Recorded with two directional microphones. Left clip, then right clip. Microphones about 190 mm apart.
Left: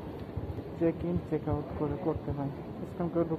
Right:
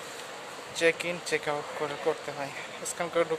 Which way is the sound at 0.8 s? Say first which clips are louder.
Right 5 dB; 50° right (ahead or behind).